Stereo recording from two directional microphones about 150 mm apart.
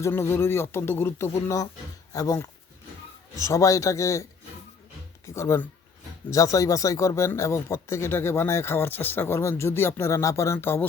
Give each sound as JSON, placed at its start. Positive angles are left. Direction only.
{"t": 0.0, "sound": "speech", "side_deg": 15}